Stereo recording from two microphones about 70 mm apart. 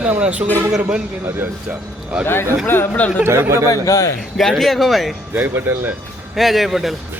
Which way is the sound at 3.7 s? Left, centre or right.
Left.